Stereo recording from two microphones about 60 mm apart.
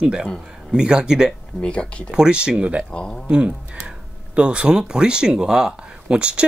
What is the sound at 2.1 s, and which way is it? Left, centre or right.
Speech, centre.